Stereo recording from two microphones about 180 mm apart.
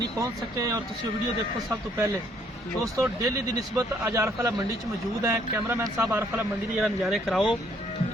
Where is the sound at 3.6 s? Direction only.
15° right (ahead or behind); by 7.4 s centre (ahead or behind).